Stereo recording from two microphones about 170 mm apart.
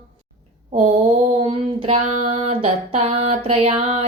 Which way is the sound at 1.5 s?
35° right (ahead or behind).